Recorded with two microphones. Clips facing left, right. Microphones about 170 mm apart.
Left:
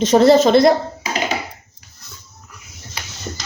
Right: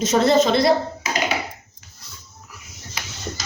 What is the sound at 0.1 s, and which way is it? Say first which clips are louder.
Speech: left 6 dB; 30° left (ahead or behind).